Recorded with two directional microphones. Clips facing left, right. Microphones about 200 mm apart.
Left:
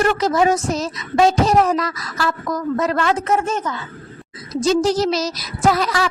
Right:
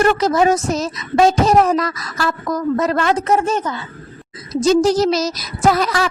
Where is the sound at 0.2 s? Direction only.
45° right (ahead or behind).